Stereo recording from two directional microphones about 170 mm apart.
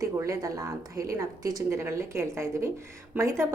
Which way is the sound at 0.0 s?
20° right (ahead or behind).